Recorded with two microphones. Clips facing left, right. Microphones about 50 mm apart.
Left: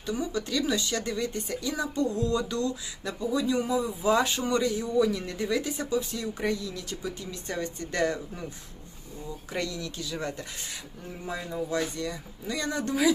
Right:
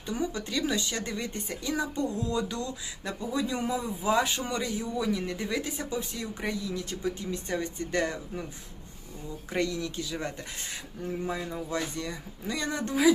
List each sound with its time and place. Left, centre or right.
0.0 s speech: right
4.1 s a man's voice: centre
6.7 s speech: right
7.4 s a man's voice: centre
9.5 s speech: right
11.7 s speech: right